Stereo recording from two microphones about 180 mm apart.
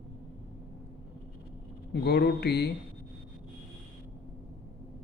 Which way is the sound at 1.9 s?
65° left (ahead or behind).